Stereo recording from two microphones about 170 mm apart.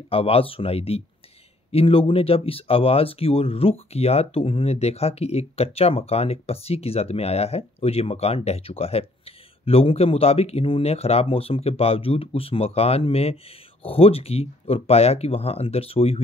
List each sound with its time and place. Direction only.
0.1 s speech: 35° left (ahead or behind)